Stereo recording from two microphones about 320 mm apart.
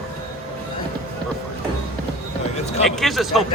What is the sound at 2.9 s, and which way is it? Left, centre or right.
Speech, centre.